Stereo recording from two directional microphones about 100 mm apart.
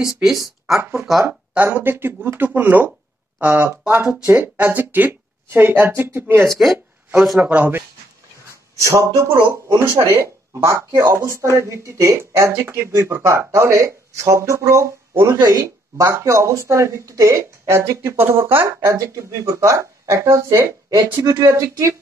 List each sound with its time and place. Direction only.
0.0 s speech: 5° right (ahead or behind)
1.5 s speech: 20° right (ahead or behind)
6.5 s speech: centre (ahead or behind)
7.3 s speech: 20° right (ahead or behind)
8.8 s speech: 30° right (ahead or behind)
18.9 s speech: 35° right (ahead or behind)